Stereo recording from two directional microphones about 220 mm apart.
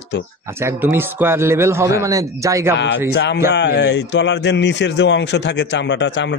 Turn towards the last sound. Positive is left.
turn(degrees=55)  # may be behind; listen again after turning